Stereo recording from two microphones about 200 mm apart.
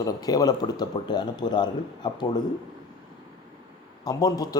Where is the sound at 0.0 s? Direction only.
20° left (ahead or behind).